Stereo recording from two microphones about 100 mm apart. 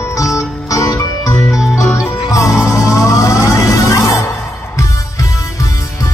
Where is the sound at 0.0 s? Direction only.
30° left (ahead or behind).